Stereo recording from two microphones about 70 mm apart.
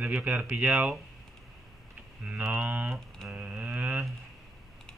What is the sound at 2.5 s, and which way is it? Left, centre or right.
Speech, right.